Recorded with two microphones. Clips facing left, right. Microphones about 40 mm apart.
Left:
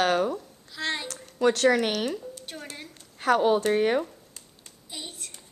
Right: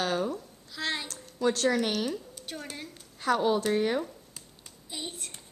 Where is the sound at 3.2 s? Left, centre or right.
Left.